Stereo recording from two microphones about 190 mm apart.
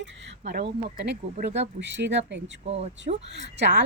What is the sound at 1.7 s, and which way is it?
Speech, 70° right (ahead or behind).